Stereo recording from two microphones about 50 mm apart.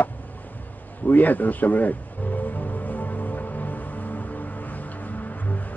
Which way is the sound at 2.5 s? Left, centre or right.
Left.